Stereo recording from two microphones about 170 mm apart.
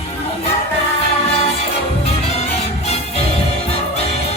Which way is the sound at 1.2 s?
35° left (ahead or behind).